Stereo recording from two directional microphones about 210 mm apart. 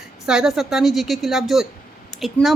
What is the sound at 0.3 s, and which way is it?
A woman's voice, centre (ahead or behind).